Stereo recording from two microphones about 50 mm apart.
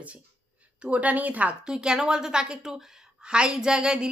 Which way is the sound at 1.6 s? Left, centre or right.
Centre.